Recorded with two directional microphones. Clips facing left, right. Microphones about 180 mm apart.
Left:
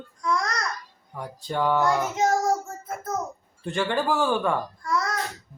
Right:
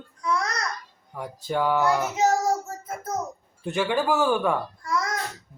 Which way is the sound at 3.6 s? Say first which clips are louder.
Right 1 dB; 5° right (ahead or behind).